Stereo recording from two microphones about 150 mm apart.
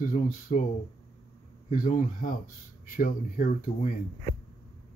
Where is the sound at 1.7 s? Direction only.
60° left (ahead or behind).